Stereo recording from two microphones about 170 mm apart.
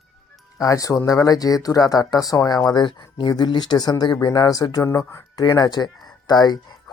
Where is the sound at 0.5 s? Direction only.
20° left (ahead or behind).